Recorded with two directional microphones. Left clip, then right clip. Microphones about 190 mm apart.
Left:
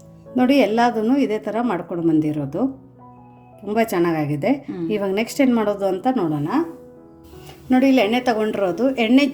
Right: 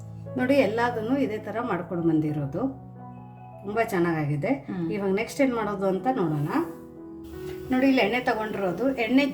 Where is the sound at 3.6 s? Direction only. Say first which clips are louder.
Left 6 dB; 50° left (ahead or behind).